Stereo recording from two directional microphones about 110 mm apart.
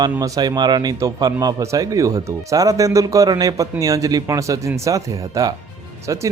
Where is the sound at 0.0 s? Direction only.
35° right (ahead or behind).